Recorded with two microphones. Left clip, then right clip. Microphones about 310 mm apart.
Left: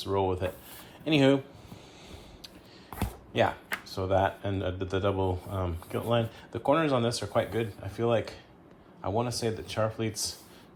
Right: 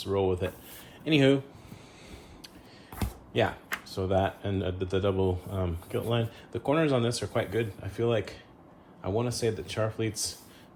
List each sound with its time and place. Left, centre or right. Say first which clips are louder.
0.0 s speech: right 1 dB; centre
3.0 s a sound: left 1 dB; centre
3.8 s speech: left 1 dB; left